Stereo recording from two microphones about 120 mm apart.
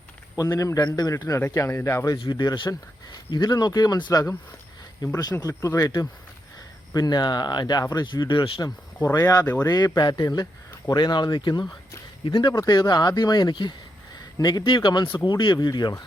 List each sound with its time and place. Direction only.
0.3 s a man's voice: 30° left (ahead or behind)
2.1 s a man's voice: 35° left (ahead or behind)
9.0 s a man's voice: 25° left (ahead or behind)